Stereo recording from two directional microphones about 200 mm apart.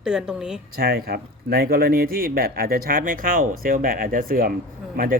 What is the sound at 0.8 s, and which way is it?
A man's voice, 50° right (ahead or behind).